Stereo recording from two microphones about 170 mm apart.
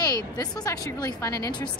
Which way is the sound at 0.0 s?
25° left (ahead or behind).